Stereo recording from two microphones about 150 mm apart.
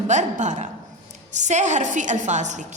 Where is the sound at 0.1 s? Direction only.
55° right (ahead or behind).